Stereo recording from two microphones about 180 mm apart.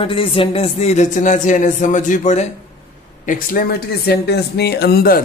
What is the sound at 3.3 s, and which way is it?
Speech, 50° left (ahead or behind).